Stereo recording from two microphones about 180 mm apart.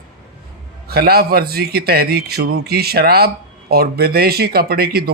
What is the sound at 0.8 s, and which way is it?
A man's voice, 60° right (ahead or behind).